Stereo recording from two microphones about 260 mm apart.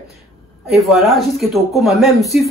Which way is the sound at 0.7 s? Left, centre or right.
Centre.